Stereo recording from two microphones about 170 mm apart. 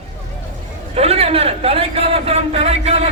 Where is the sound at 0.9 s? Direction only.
35° right (ahead or behind).